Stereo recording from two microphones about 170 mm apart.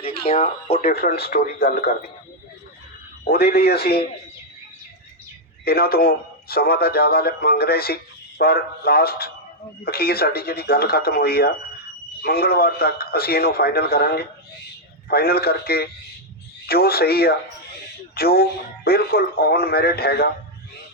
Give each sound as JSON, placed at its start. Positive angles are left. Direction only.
{"t": 0.0, "sound": "speech", "side_deg": 35}
{"t": 0.9, "sound": "speech", "side_deg": 65}
{"t": 3.2, "sound": "a man's voice", "side_deg": 65}
{"t": 5.6, "sound": "speech", "side_deg": 65}